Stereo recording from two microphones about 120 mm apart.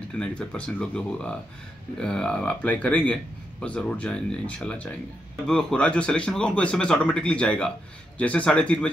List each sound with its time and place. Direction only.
0.2 s speech: 10° left (ahead or behind)